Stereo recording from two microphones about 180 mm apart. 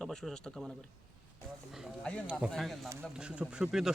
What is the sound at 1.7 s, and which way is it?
Speech, centre (ahead or behind).